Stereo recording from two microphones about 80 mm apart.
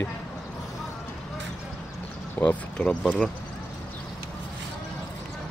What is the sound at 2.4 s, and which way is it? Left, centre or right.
Speech, centre.